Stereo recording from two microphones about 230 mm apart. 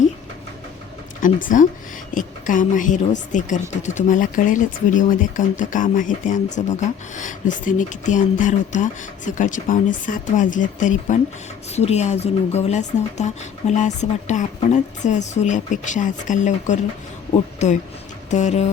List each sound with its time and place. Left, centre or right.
1.2 s speech: left